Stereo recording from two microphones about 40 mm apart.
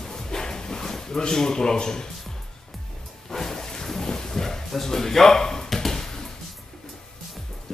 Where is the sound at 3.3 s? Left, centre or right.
Centre.